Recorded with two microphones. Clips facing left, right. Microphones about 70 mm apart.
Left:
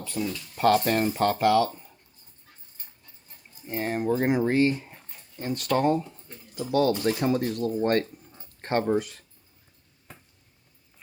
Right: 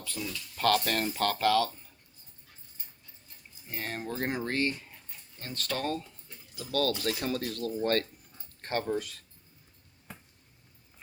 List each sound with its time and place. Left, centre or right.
0.0 s speech: left
3.7 s speech: centre
6.2 s a sound: left
6.7 s speech: left